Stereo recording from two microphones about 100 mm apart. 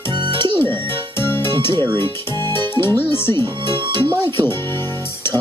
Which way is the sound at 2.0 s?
25° left (ahead or behind).